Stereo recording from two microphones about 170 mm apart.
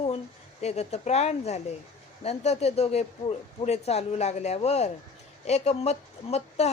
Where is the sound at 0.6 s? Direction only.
40° left (ahead or behind).